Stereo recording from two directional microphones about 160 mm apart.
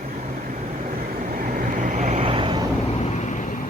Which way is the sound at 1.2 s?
55° right (ahead or behind).